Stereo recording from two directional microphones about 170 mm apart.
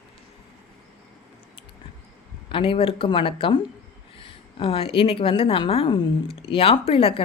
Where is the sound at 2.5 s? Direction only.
30° left (ahead or behind).